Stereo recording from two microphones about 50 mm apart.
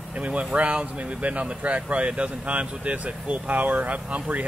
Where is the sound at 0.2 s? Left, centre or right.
Right.